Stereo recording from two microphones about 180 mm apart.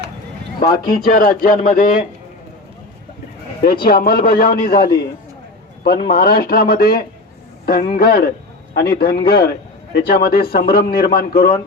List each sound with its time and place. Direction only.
0.9 s speech: 50° left (ahead or behind)
3.6 s a man's voice: 55° left (ahead or behind)